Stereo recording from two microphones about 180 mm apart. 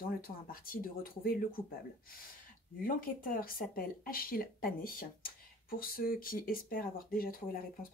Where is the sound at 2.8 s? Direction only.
50° left (ahead or behind).